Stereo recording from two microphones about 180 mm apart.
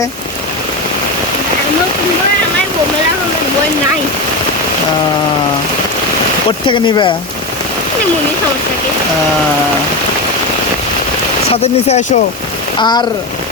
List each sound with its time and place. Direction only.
6.7 s speech: 25° left (ahead or behind)
11.6 s speech: 35° left (ahead or behind)
12.8 s speech: 25° left (ahead or behind)